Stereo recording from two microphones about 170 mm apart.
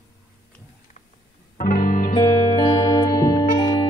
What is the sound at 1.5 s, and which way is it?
Music, 50° left (ahead or behind).